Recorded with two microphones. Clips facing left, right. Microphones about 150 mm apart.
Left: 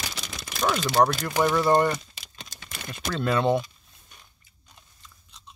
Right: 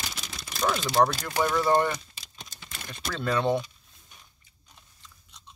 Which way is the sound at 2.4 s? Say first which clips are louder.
Left 1 dB; 85° left.